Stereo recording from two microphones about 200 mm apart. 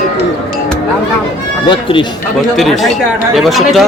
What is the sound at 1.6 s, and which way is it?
Speech, 25° left (ahead or behind).